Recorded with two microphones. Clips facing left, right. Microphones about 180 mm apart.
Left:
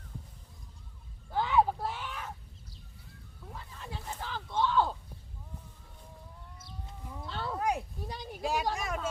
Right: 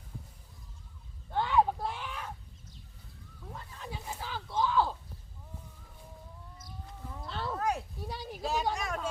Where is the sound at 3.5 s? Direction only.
Centre (ahead or behind).